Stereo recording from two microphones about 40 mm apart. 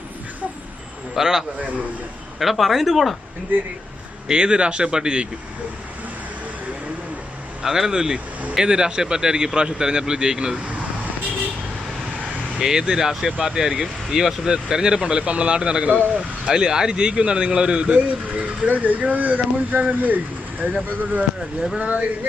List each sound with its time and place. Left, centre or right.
1.1 s speech: centre
1.5 s speech: right
2.4 s speech: centre
4.3 s speech: right
7.6 s speech: centre
12.5 s speech: centre
15.2 s speech: right
17.9 s speech: right
19.7 s speech: right
21.8 s speech: right